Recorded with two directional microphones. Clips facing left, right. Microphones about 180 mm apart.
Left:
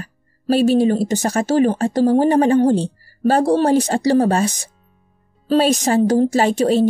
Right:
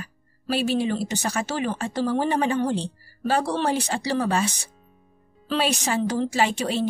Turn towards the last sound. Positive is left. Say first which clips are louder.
# left 8 dB
turn(degrees=45)  # may be behind; listen again after turning